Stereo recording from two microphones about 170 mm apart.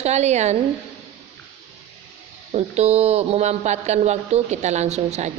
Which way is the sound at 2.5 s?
40° right (ahead or behind).